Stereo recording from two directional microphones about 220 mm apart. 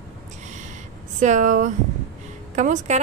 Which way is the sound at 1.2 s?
35° right (ahead or behind).